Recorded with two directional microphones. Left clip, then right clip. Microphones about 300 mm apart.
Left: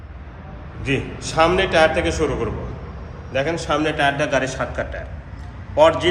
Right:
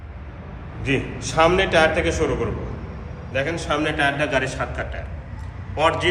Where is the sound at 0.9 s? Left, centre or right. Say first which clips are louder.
Even; centre.